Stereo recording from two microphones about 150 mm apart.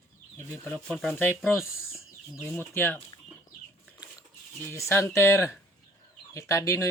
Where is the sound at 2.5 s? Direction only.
15° left (ahead or behind).